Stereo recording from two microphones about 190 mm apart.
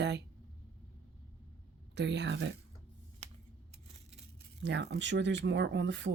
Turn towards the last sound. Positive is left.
turn(degrees=-70)  # may be behind; listen again after turning